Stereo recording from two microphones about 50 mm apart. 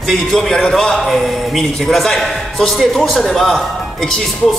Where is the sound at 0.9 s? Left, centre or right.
Centre.